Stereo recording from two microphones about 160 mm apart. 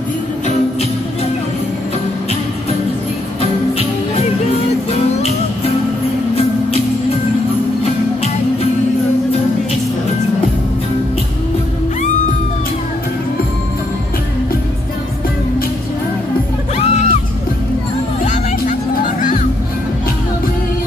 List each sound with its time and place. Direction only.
3.7 s music: 40° left (ahead or behind)
16.7 s music: 45° left (ahead or behind)
18.2 s music: 50° left (ahead or behind)